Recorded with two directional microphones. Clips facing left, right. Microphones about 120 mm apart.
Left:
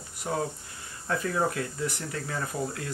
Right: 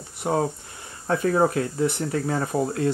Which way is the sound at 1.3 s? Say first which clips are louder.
Right 7 dB; 35° right (ahead or behind).